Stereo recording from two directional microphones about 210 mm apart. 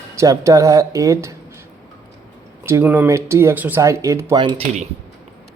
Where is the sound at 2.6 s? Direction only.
10° right (ahead or behind).